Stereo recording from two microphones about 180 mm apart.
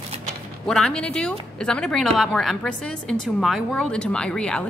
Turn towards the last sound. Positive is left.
turn(degrees=5)  # may be behind; listen again after turning